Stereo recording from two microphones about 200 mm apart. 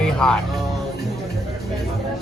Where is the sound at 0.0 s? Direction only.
5° left (ahead or behind).